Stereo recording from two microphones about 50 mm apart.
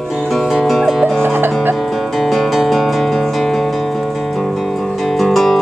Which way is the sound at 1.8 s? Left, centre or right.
Centre.